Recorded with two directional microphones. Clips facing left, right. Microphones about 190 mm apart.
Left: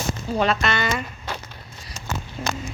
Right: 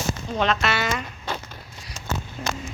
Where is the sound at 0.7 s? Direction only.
5° right (ahead or behind).